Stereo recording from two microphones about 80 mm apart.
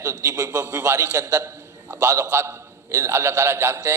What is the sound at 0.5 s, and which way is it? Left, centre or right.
A man's voice, right.